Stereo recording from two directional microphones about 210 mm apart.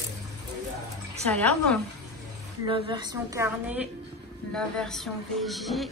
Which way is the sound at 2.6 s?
20° right (ahead or behind).